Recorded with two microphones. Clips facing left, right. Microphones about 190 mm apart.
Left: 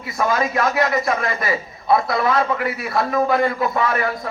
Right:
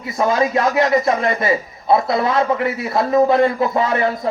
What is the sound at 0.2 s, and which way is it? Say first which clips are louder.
A man's voice: right 3 dB; 25° right (ahead or behind).